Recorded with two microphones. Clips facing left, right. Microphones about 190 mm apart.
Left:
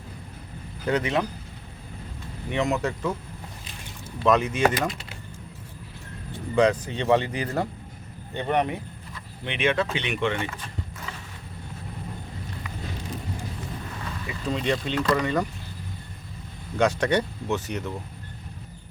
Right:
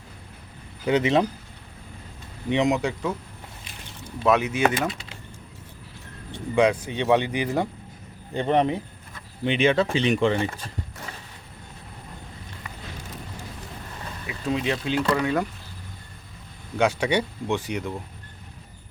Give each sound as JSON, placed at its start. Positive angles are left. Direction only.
{"t": 0.9, "sound": "speech", "side_deg": -25}
{"t": 2.5, "sound": "speech", "side_deg": -20}
{"t": 4.2, "sound": "speech", "side_deg": -5}
{"t": 6.6, "sound": "speech", "side_deg": -10}
{"t": 8.3, "sound": "speech", "side_deg": -30}
{"t": 14.3, "sound": "speech", "side_deg": -5}
{"t": 16.7, "sound": "speech", "side_deg": -10}